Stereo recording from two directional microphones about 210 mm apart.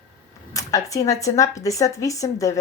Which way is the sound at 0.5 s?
15° left (ahead or behind).